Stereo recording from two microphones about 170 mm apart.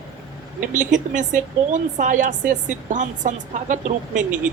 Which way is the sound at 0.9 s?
45° right (ahead or behind).